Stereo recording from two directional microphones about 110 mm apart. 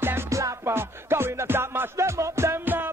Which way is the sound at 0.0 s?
25° right (ahead or behind).